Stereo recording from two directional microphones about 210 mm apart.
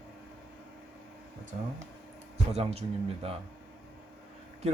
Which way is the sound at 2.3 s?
30° right (ahead or behind).